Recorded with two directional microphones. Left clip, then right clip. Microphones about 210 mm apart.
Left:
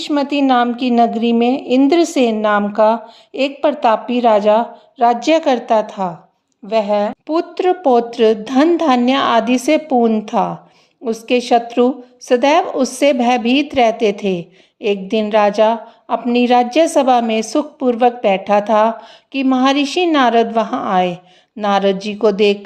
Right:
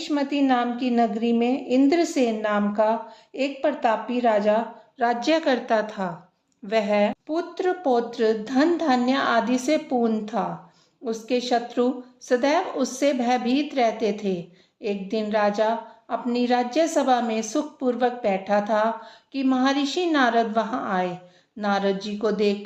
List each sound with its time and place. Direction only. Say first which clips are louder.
0.0 s a woman's voice: left 8 dB; 30° left (ahead or behind)
7.3 s a woman's voice: left 9 dB; 45° left (ahead or behind)